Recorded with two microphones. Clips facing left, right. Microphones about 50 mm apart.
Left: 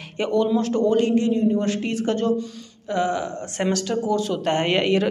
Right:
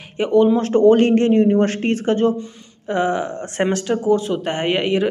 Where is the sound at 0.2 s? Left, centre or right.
Right.